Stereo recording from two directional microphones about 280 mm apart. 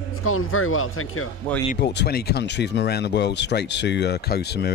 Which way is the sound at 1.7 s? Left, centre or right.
Left.